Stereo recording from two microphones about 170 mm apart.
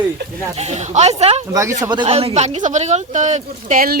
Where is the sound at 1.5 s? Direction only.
20° right (ahead or behind).